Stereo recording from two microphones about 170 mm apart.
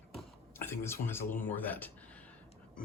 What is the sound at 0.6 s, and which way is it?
Speech, 15° left (ahead or behind).